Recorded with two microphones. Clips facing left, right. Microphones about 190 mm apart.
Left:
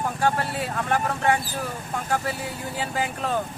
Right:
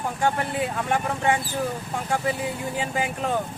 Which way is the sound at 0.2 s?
20° right (ahead or behind).